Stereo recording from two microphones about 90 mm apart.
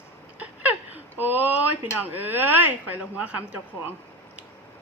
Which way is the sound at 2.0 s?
20° right (ahead or behind).